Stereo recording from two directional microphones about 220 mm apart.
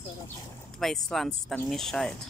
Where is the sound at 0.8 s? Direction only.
Centre (ahead or behind).